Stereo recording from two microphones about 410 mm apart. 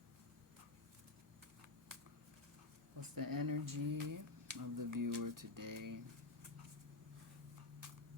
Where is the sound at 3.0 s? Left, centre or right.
Right.